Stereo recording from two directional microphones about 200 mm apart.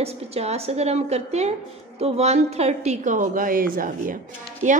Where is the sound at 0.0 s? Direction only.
30° right (ahead or behind).